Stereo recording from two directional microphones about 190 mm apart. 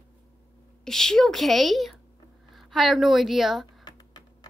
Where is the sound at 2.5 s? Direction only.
Centre (ahead or behind).